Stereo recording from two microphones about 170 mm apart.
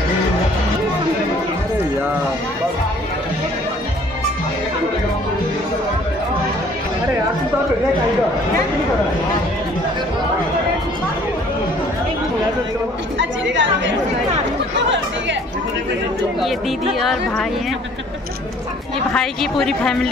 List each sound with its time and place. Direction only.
13.2 s chatter: 90° right
17.0 s a woman's voice: centre (ahead or behind)
19.1 s a woman's voice: 5° left (ahead or behind)